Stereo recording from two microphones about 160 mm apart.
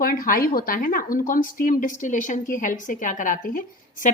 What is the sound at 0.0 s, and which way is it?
A woman's voice, 65° left (ahead or behind).